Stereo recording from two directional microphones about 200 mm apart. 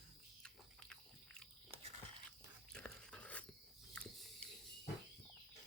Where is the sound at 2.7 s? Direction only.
5° left (ahead or behind).